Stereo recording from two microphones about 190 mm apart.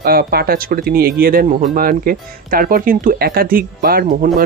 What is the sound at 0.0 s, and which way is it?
Speech, 50° right (ahead or behind).